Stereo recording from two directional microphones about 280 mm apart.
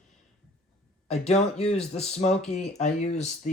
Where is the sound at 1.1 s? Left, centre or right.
Left.